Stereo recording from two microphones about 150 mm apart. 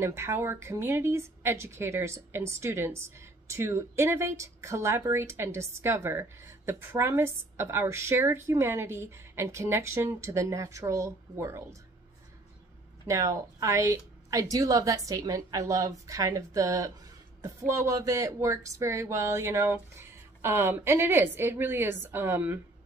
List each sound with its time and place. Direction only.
0.0 s a woman's voice: 15° right (ahead or behind)
13.0 s a woman's voice: 20° right (ahead or behind)